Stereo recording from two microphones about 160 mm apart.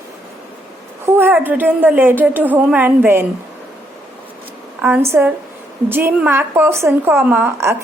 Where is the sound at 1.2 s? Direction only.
10° right (ahead or behind).